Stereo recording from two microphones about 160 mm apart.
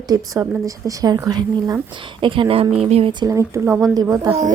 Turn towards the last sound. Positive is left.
turn(degrees=-20)  # may be behind; listen again after turning